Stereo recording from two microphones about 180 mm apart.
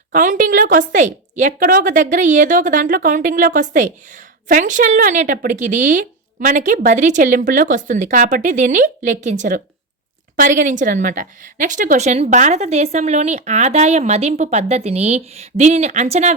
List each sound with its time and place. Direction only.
0.1 s a woman's voice: 45° right (ahead or behind)